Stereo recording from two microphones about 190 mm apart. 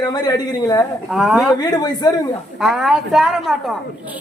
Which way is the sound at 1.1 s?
5° right (ahead or behind).